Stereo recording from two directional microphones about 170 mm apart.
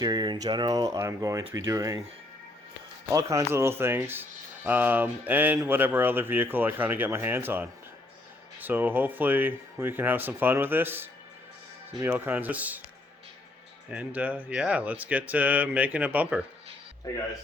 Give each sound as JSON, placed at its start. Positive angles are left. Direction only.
{"t": 0.0, "sound": "speech", "side_deg": -25}
{"t": 3.1, "sound": "speech", "side_deg": -20}
{"t": 13.9, "sound": "speech", "side_deg": -10}
{"t": 17.1, "sound": "speech", "side_deg": 20}